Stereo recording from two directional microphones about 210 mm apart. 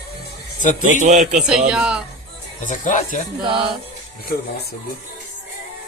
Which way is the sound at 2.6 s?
35° left (ahead or behind).